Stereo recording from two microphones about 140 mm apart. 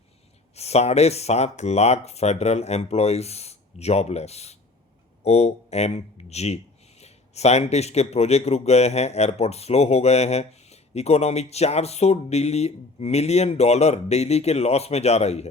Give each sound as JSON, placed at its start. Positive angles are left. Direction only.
{"t": 0.5, "sound": "speech", "side_deg": 50}